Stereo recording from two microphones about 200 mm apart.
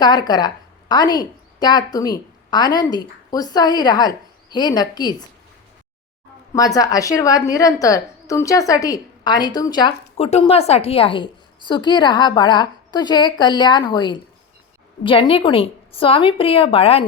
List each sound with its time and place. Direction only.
0.0 s a woman's voice: 20° left (ahead or behind)
6.7 s a woman's voice: 15° left (ahead or behind)